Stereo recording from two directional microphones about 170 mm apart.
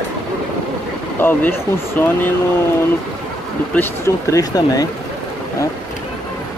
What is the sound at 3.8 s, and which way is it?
Speech, 20° left (ahead or behind).